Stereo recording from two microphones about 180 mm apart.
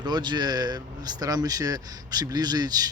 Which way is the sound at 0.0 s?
25° right (ahead or behind).